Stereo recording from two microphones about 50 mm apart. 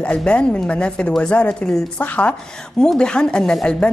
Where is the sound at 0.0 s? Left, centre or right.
Left.